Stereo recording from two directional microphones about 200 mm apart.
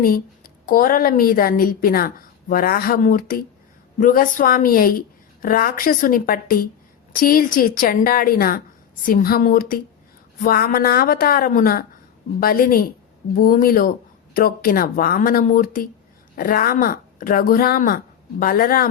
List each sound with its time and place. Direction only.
0.0 s a woman's voice: 45° left (ahead or behind)